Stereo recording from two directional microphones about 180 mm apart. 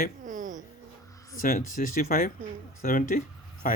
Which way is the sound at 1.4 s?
50° left (ahead or behind).